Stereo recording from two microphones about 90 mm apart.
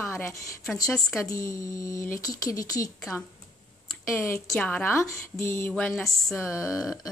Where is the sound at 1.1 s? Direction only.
35° left (ahead or behind).